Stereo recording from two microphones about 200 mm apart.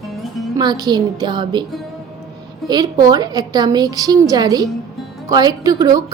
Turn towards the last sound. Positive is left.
turn(degrees=-20)  # may be behind; listen again after turning